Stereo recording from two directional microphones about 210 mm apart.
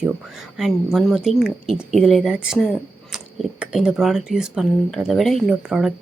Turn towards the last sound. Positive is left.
turn(degrees=0)  # may be behind; listen again after turning